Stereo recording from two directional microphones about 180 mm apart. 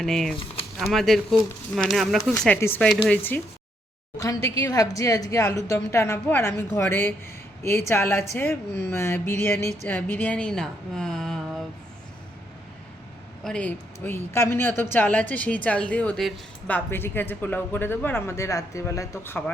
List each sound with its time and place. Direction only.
0.0 s a woman's voice: centre (ahead or behind)
2.4 s a woman's voice: 10° left (ahead or behind)
13.4 s speech: 5° left (ahead or behind)